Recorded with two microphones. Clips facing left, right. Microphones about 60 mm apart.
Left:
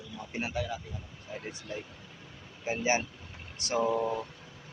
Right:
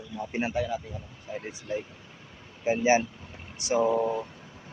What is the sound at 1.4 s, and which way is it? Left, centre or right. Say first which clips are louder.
Speech: right 7 dB; centre.